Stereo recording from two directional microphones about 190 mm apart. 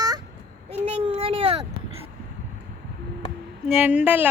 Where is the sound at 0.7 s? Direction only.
35° right (ahead or behind).